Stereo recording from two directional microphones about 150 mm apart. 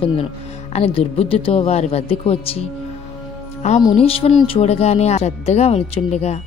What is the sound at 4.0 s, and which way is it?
A woman's voice, 40° left (ahead or behind).